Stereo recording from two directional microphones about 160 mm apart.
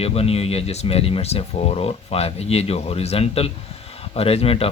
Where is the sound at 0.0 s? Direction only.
40° left (ahead or behind).